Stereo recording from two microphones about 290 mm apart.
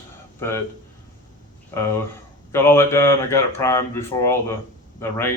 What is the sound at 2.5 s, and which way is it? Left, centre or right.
Speech, centre.